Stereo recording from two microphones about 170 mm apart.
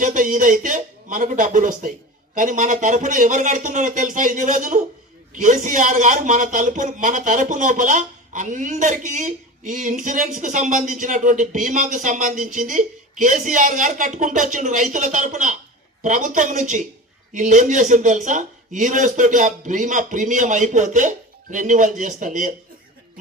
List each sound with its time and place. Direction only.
0.0 s a man's voice: 50° right (ahead or behind)